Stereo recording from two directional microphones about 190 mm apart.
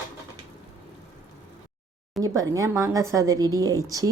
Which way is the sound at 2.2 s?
15° right (ahead or behind).